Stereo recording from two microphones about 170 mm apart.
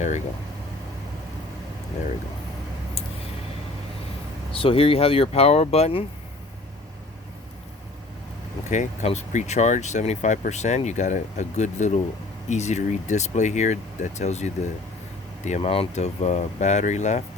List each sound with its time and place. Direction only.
4.5 s speech: 35° left (ahead or behind)
8.7 s speech: 45° left (ahead or behind)